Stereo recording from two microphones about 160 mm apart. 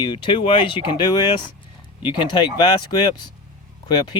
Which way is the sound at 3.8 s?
25° left (ahead or behind).